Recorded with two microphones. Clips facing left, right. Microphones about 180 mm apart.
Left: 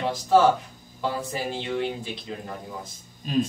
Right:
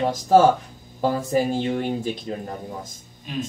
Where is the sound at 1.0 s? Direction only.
45° right (ahead or behind).